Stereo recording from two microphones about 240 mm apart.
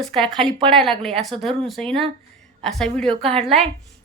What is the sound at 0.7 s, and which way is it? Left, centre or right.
Speech, centre.